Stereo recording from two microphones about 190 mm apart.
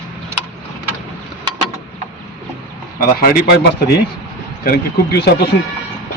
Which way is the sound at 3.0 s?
50° left (ahead or behind).